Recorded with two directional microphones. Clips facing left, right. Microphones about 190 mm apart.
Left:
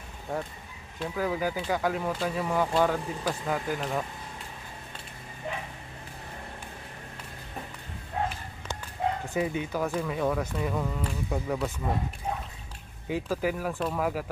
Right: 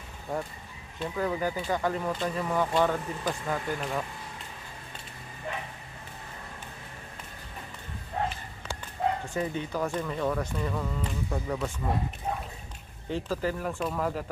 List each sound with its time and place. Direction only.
0.3 s speech: centre (ahead or behind)
9.3 s speech: 10° left (ahead or behind)
13.1 s speech: 10° left (ahead or behind)